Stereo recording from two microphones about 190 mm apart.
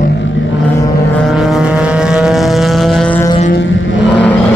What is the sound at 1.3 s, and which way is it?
Vehicle, 5° right (ahead or behind).